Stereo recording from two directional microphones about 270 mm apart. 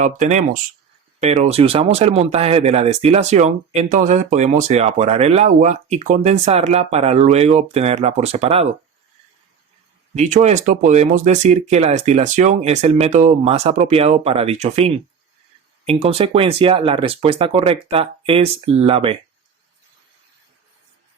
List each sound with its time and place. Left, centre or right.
0.0 s speech: right
10.2 s speech: right